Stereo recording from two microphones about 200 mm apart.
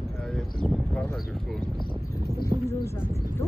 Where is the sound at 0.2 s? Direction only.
5° left (ahead or behind).